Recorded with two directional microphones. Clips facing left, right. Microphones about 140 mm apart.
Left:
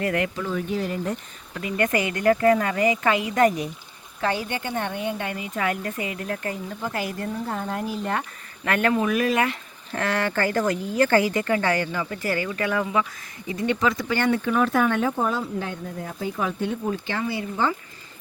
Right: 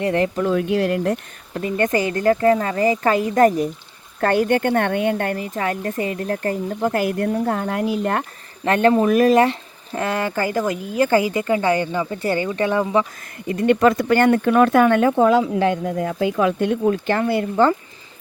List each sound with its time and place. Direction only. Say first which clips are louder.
0.0 s speech: right 5 dB; 30° right (ahead or behind)
0.4 s speech: right 8 dB; 75° right (ahead or behind)
1.5 s speech: right 4 dB; 35° right (ahead or behind)
4.2 s speech: right 9 dB; 55° right (ahead or behind)
5.5 s speech: even; 35° right (ahead or behind); by 8.2 s 65° right (ahead or behind)
8.6 s speech: right 6 dB; 30° right (ahead or behind)
9.9 s speech: right 2 dB; 20° right (ahead or behind)
13.5 s speech: right 8 dB; 60° right (ahead or behind)